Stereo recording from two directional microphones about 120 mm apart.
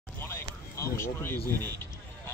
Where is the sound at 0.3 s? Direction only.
20° left (ahead or behind).